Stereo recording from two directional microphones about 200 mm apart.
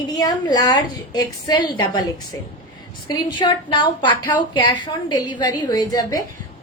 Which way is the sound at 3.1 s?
20° left (ahead or behind).